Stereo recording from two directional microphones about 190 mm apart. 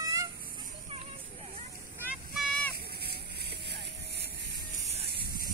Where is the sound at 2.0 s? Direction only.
5° right (ahead or behind).